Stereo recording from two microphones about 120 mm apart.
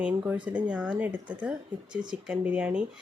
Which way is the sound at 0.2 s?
10° right (ahead or behind).